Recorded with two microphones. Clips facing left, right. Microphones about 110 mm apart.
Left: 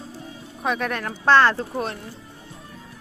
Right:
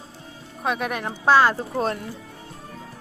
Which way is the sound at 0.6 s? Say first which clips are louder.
Even; 5° right (ahead or behind).